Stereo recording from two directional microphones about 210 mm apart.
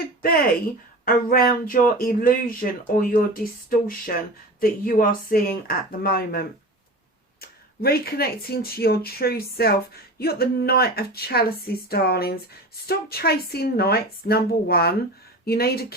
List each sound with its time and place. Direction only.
1.0 s speech: 45° left (ahead or behind)
7.4 s speech: 45° left (ahead or behind)